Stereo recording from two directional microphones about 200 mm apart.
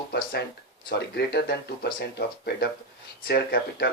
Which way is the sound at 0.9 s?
55° left (ahead or behind).